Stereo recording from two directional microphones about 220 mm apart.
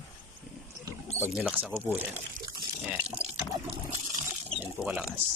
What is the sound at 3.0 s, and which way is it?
Water, 25° right (ahead or behind).